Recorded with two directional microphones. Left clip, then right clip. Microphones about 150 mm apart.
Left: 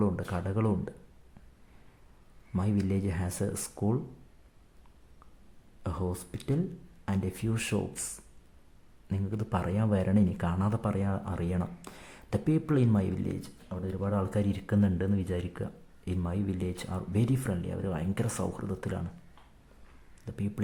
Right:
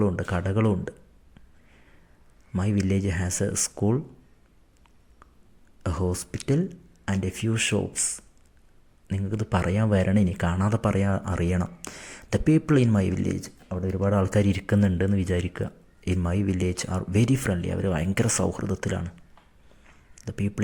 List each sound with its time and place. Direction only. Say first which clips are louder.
0.0 s speech: right 6 dB; 25° right (ahead or behind)
2.6 s speech: right 5 dB; 15° right (ahead or behind)
5.8 s speech: right 7 dB; 20° right (ahead or behind)
9.0 s speech: right 5 dB; 20° right (ahead or behind)
13.4 s speech: right 7 dB; 35° right (ahead or behind)
20.2 s speech: right 7 dB; 25° right (ahead or behind)